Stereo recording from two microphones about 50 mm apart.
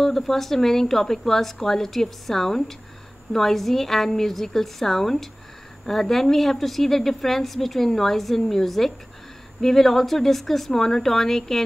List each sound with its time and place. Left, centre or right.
0.0 s a woman's voice: centre